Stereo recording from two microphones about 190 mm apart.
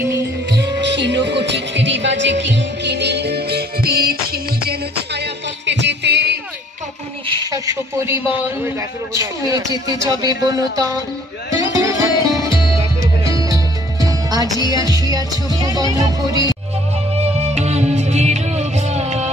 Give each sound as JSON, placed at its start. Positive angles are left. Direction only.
{"t": 0.5, "sound": "music", "side_deg": -65}
{"t": 7.2, "sound": "a man's voice", "side_deg": -20}
{"t": 11.8, "sound": "music", "side_deg": -20}
{"t": 14.7, "sound": "speech", "side_deg": -20}
{"t": 17.1, "sound": "music", "side_deg": -35}